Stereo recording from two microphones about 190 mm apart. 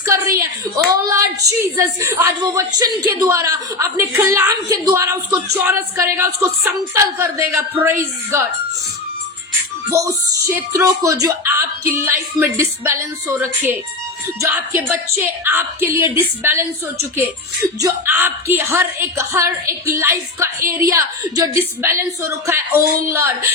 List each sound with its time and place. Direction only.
0.0 s a sound: 15° right (ahead or behind)
0.9 s a woman's voice: 15° right (ahead or behind)
10.5 s a woman's voice: 15° right (ahead or behind)
15.2 s a woman's voice: 10° right (ahead or behind)